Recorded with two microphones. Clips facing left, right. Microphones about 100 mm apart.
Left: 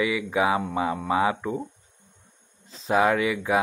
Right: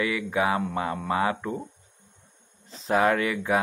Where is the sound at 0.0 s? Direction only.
10° left (ahead or behind).